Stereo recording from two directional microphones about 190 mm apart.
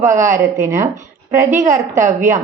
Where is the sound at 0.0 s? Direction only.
15° right (ahead or behind).